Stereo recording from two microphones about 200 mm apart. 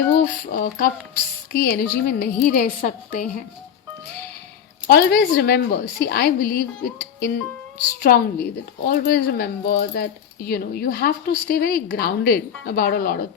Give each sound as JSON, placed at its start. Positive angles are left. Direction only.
{"t": 0.1, "sound": "speech", "side_deg": 40}
{"t": 4.9, "sound": "speech", "side_deg": 50}